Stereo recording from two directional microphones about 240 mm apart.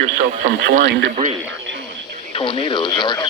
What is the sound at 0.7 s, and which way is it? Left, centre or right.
Speech, right.